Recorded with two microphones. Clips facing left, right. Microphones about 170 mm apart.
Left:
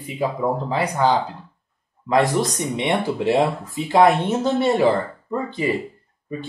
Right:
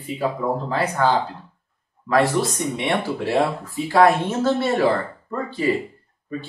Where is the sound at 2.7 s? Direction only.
20° left (ahead or behind).